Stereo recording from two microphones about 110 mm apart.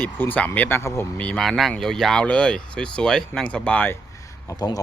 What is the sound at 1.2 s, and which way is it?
Speech, 10° left (ahead or behind).